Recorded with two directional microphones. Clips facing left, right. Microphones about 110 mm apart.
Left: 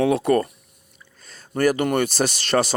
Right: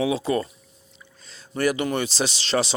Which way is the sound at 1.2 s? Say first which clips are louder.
Left 4 dB; 50° left (ahead or behind).